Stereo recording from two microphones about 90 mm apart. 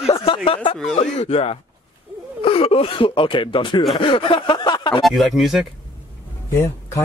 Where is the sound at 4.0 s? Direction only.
80° left; by 5.0 s 60° left (ahead or behind).